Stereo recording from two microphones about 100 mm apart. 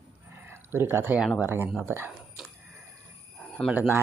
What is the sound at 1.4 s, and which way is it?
Speech, 20° right (ahead or behind).